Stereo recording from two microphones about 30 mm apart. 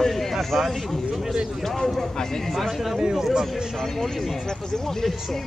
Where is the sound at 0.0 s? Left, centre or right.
Centre.